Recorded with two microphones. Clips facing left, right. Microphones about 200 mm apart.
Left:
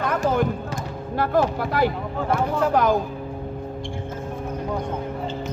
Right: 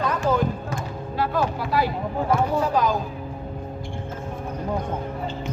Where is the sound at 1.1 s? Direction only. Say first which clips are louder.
Left 3 dB; 50° left (ahead or behind).